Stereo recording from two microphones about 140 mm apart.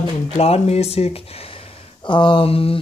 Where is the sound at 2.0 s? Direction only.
35° left (ahead or behind).